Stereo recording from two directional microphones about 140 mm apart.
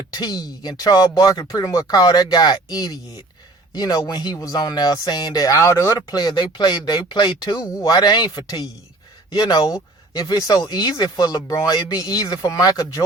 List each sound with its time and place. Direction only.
0.1 s speech: 30° left (ahead or behind)